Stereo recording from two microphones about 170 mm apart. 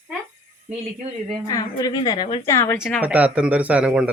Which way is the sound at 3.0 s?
10° right (ahead or behind).